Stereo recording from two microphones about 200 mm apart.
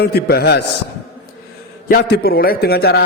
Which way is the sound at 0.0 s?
50° left (ahead or behind).